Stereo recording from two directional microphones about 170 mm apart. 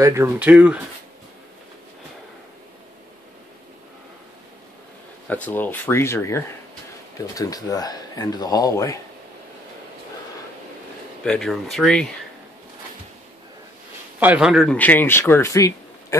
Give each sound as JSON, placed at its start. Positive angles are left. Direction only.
{"t": 0.0, "sound": "speech", "side_deg": -15}
{"t": 5.3, "sound": "speech", "side_deg": 10}
{"t": 11.2, "sound": "speech", "side_deg": 0}
{"t": 14.2, "sound": "speech", "side_deg": -5}
{"t": 14.7, "sound": "speech", "side_deg": 10}